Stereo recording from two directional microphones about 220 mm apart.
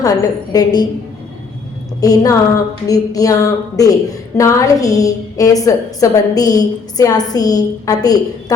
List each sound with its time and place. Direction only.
0.0 s a woman's voice: 15° left (ahead or behind)
2.0 s a woman's voice: 15° left (ahead or behind)